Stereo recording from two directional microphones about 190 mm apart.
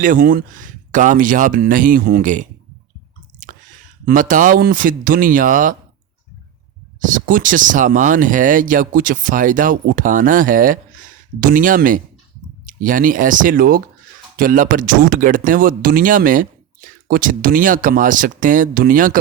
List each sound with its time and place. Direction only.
0.0 s speech: 45° right (ahead or behind)
7.0 s speech: 45° right (ahead or behind)